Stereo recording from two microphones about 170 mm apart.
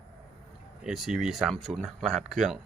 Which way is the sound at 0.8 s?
Centre (ahead or behind).